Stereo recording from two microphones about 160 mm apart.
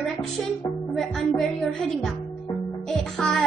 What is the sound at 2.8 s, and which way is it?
Music, 5° left (ahead or behind).